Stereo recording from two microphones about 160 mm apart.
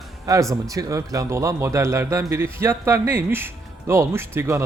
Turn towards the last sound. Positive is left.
turn(degrees=-15)  # may be behind; listen again after turning